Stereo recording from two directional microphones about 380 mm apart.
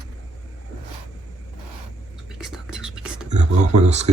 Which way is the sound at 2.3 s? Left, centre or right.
Centre.